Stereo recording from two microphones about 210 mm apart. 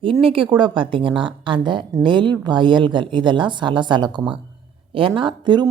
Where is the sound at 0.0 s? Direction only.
25° right (ahead or behind).